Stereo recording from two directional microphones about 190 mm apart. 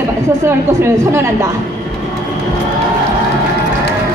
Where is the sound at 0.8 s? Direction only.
15° right (ahead or behind).